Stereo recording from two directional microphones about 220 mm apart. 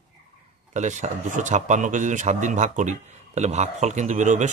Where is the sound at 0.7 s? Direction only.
35° right (ahead or behind).